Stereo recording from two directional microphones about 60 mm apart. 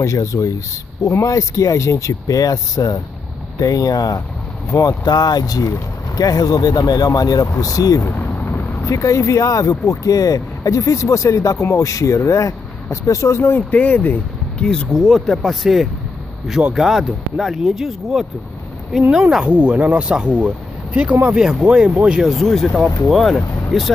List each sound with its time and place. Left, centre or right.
0.0 s speech: left
4.7 s speech: left
5.4 s speech: left
8.8 s speech: left
13.6 s speech: left
14.6 s speech: centre
19.1 s speech: centre
21.4 s speech: centre
22.2 s speech: centre